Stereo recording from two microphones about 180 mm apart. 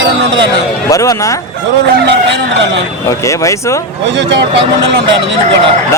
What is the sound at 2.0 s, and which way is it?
Speech, 80° right.